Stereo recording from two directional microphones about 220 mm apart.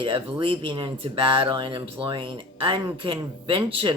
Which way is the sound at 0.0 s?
25° right (ahead or behind).